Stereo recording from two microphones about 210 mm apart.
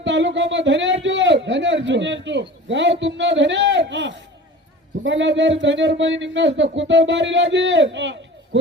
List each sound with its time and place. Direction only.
0.0 s speech: 60° right (ahead or behind)
1.0 s a sound: 60° right (ahead or behind)
5.0 s speech: 60° right (ahead or behind)